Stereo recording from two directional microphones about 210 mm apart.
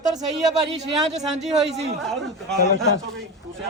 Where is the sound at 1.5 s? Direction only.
30° right (ahead or behind).